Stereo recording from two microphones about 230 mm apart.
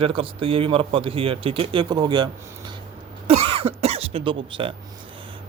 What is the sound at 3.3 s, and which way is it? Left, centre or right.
Cough, right.